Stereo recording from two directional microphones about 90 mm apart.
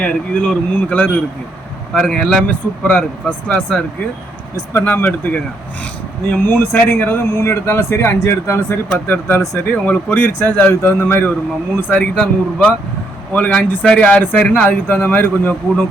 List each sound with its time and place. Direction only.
0.0 s a man's voice: 15° left (ahead or behind)
6.4 s a man's voice: 25° left (ahead or behind)